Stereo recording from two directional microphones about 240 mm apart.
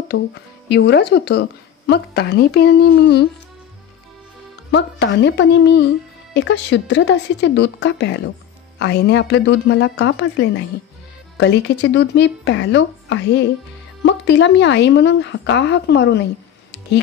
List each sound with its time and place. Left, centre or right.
0.1 s speech: left
4.6 s speech: left